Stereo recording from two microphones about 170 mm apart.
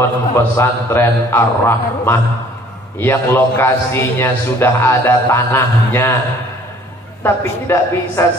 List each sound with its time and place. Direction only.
0.0 s a man's voice: 15° left (ahead or behind)
7.2 s a man's voice: 15° left (ahead or behind)